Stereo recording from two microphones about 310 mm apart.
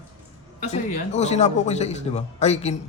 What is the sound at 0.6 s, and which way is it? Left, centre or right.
A man's voice, left.